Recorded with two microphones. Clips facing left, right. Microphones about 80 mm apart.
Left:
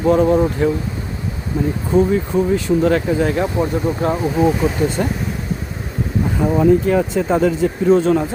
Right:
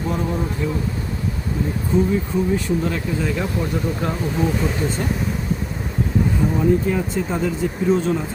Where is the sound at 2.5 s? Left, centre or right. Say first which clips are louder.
Left 6 dB; left.